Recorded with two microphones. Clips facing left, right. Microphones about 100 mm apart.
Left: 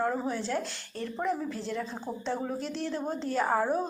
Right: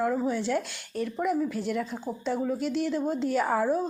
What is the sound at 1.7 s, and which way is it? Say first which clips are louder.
Speech: right 4 dB; 20° left (ahead or behind).